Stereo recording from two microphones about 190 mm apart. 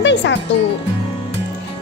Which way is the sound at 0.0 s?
70° left (ahead or behind).